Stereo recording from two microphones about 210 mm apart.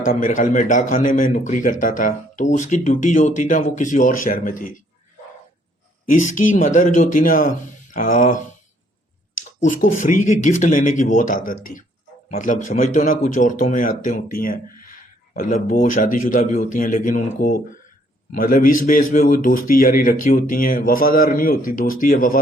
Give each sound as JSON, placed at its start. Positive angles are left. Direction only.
{"t": 0.0, "sound": "speech", "side_deg": 40}
{"t": 6.1, "sound": "speech", "side_deg": 35}
{"t": 9.6, "sound": "speech", "side_deg": 40}